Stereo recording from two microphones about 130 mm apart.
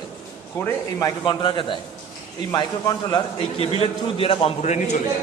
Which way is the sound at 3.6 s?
50° left (ahead or behind).